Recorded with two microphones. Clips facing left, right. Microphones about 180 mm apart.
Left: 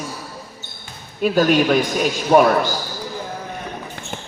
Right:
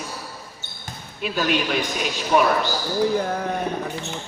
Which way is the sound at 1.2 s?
45° left (ahead or behind).